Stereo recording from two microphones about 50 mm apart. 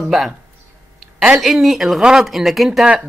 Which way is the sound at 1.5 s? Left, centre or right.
Centre.